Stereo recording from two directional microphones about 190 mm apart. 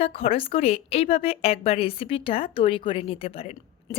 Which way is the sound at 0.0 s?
30° left (ahead or behind).